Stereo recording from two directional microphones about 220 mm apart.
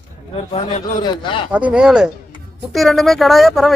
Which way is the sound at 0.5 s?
30° left (ahead or behind).